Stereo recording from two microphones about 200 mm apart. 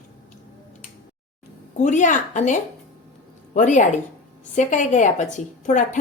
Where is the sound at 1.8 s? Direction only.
40° left (ahead or behind).